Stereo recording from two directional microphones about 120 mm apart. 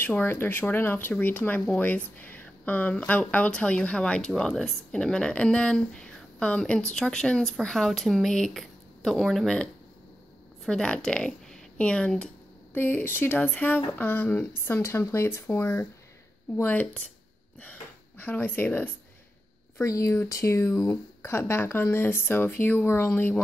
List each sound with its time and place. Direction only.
0.0 s speech: 15° left (ahead or behind)